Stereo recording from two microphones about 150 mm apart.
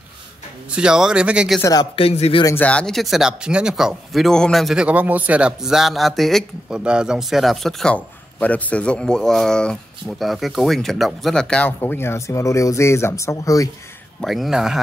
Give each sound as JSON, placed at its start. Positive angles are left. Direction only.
{"t": 0.7, "sound": "speech", "side_deg": -5}
{"t": 1.6, "sound": "speech", "side_deg": 25}
{"t": 2.0, "sound": "speech", "side_deg": 40}
{"t": 2.4, "sound": "speech", "side_deg": 10}
{"t": 11.8, "sound": "speech", "side_deg": 15}
{"t": 14.2, "sound": "speech", "side_deg": 0}